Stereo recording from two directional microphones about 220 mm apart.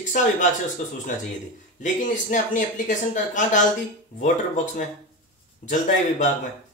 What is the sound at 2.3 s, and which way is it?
A man's voice, 35° left (ahead or behind).